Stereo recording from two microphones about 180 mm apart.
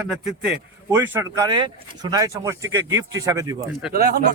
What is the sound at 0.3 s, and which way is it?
Speech, 5° right (ahead or behind).